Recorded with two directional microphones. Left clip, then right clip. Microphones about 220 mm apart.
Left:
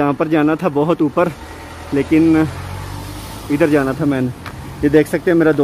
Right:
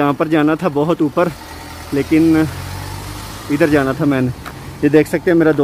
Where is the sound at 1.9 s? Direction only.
Centre (ahead or behind).